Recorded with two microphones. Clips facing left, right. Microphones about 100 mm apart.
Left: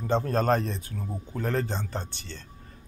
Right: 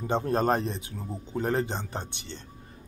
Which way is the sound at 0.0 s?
15° right (ahead or behind).